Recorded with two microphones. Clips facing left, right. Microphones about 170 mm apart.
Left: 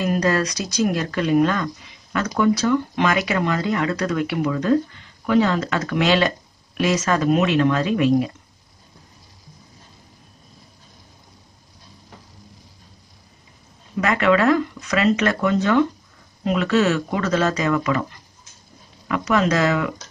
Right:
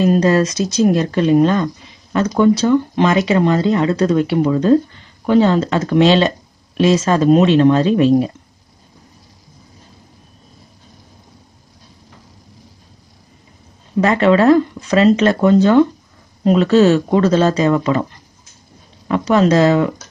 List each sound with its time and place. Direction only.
0.0 s speech: 25° right (ahead or behind)
14.0 s speech: 30° right (ahead or behind)
19.0 s speech: 30° right (ahead or behind)